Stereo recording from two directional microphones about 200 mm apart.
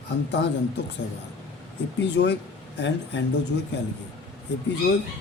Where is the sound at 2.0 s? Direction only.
60° left (ahead or behind).